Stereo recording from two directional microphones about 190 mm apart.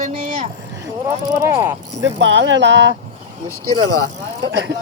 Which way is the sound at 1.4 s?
15° right (ahead or behind).